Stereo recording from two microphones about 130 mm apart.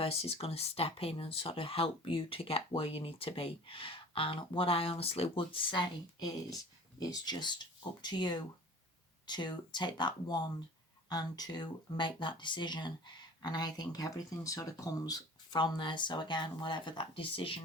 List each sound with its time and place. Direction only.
0.0 s speech: 50° left (ahead or behind)